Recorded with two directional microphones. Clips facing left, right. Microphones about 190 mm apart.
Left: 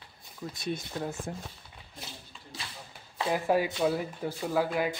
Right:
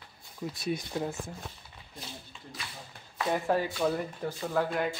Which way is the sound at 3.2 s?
10° left (ahead or behind).